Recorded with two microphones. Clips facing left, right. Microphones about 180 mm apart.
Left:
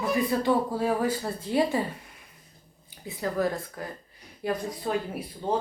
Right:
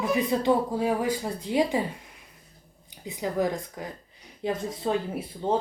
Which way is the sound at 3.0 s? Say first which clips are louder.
Right 1 dB; 15° right (ahead or behind).